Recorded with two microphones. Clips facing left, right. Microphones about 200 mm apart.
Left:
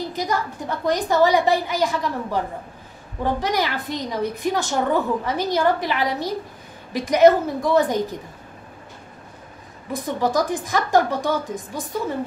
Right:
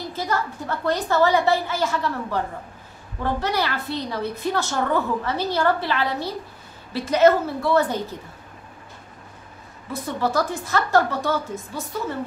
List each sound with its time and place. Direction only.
0.1 s a woman's voice: 15° left (ahead or behind)
9.9 s a woman's voice: 15° left (ahead or behind)